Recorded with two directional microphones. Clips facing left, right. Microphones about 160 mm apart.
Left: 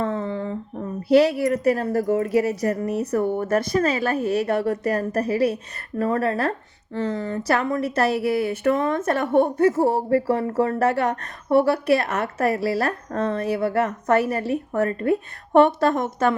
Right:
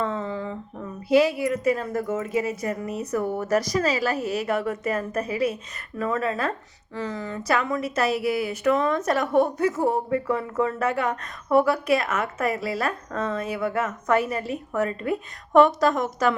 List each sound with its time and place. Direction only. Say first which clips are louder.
0.0 s a sound: left 2 dB; 50° left (ahead or behind)
1.0 s a woman's voice: left 3 dB; 65° left (ahead or behind)
1.9 s a woman's voice: left 6 dB; 35° left (ahead or behind)
2.1 s a woman's voice: left 5 dB; 65° left (ahead or behind)
3.1 s a woman's voice: left 1 dB; 30° left (ahead or behind)
3.5 s a woman's voice: even; 55° left (ahead or behind)
4.6 s a woman's voice: left 5 dB; 35° left (ahead or behind)
4.9 s a woman's voice: left 4 dB; 65° left (ahead or behind)
8.8 s a woman's voice: left 1 dB; 25° left (ahead or behind)
10.7 s a woman's voice: left 4 dB; 65° left (ahead or behind)
15.8 s a woman's voice: left 2 dB; 25° left (ahead or behind)